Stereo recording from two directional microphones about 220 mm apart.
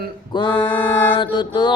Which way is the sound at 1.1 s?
20° left (ahead or behind).